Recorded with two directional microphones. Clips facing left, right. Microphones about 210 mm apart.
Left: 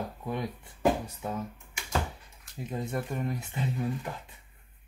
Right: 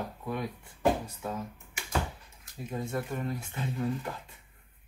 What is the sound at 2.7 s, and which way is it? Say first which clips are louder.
Speech: even; 20° left (ahead or behind).